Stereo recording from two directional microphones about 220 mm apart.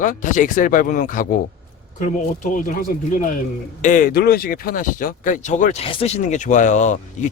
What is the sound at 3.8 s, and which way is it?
Speech, 35° left (ahead or behind).